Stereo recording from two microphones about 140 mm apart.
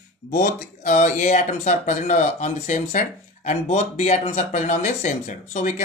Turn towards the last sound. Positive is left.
turn(degrees=55)  # may be behind; listen again after turning